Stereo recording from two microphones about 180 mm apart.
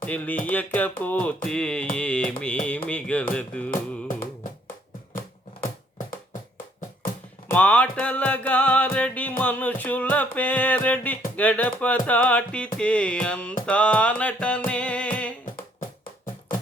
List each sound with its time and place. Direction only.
0.0 s music: 10° left (ahead or behind)
7.5 s music: 5° left (ahead or behind)
15.8 s music: 50° left (ahead or behind)